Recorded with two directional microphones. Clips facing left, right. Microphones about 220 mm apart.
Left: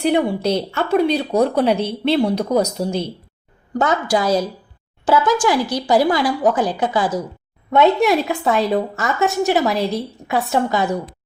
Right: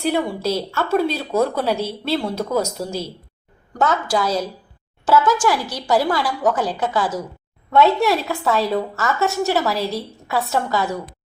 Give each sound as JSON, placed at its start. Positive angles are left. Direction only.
{"t": 0.0, "sound": "a woman's voice", "side_deg": 15}